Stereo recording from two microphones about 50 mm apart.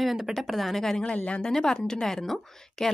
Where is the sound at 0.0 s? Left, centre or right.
Centre.